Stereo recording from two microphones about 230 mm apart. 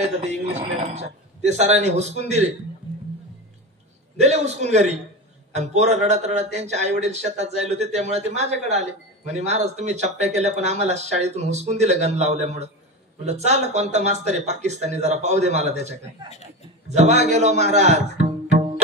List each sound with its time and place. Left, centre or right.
0.0 s speech: right
4.2 s speech: right